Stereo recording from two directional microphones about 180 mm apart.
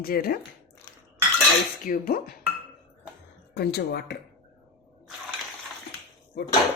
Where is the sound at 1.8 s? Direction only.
50° left (ahead or behind).